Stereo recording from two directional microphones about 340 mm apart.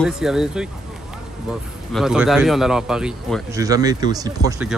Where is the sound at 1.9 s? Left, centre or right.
Centre.